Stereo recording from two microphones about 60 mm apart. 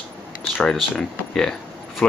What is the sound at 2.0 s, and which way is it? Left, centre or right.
Vehicle, centre.